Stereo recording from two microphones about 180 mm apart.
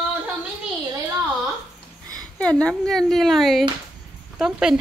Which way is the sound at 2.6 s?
5° left (ahead or behind).